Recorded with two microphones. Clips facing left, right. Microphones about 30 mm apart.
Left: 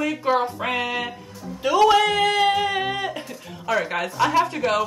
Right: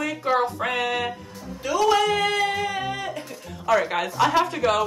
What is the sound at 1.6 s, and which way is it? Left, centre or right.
Speech, left.